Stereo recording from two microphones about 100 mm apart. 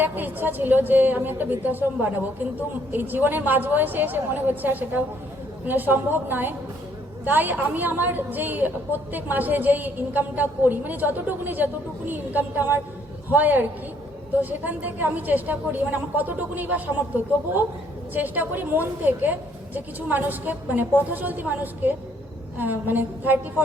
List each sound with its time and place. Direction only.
0.0 s a woman's voice: 20° right (ahead or behind)
18.1 s a woman's voice: 15° right (ahead or behind)